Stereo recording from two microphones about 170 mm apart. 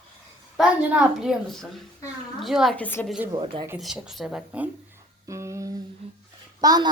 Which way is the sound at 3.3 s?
30° right (ahead or behind).